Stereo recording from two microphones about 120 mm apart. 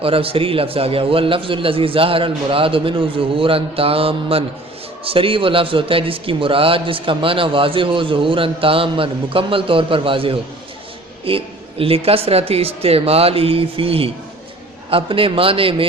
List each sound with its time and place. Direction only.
0.0 s a man's voice: 50° right (ahead or behind)